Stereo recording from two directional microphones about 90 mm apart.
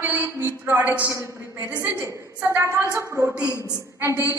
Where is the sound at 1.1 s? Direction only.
30° right (ahead or behind).